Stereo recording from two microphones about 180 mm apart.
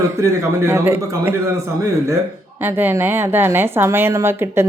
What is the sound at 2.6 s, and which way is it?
A woman's voice, 10° right (ahead or behind).